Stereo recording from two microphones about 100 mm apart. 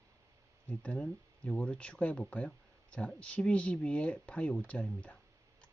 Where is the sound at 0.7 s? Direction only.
15° left (ahead or behind).